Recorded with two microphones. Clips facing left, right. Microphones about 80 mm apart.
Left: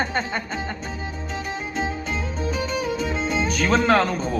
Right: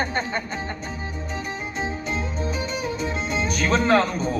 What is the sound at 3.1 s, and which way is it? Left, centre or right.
Music, left.